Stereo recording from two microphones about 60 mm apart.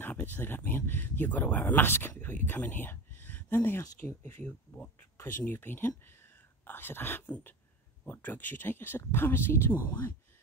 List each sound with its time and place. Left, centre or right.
0.0 s speech: left
5.5 s speech: left